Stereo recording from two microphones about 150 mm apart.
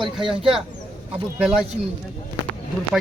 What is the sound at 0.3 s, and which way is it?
Speech, 35° right (ahead or behind).